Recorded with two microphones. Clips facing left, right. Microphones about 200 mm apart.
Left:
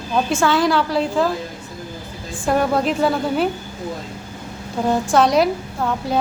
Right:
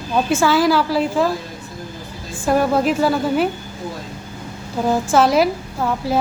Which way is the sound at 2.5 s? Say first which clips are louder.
Right 2 dB; 5° right (ahead or behind).